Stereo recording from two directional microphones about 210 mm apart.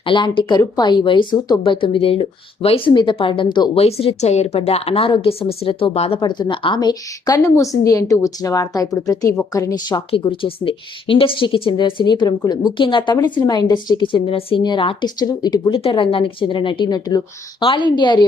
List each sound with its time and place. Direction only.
0.0 s speech: 25° left (ahead or behind)